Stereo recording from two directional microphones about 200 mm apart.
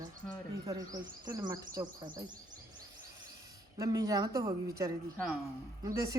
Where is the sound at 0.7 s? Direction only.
15° right (ahead or behind).